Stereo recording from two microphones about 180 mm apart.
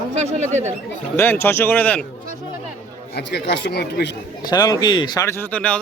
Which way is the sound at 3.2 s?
70° left (ahead or behind).